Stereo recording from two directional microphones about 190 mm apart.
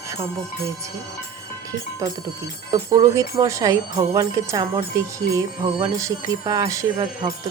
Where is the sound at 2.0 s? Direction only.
15° right (ahead or behind).